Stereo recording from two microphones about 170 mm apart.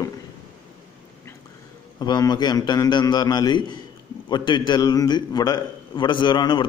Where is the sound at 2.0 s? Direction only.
25° left (ahead or behind).